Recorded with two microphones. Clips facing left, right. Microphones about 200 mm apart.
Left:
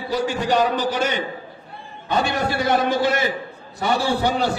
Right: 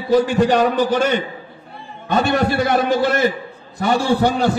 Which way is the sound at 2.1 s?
50° right (ahead or behind).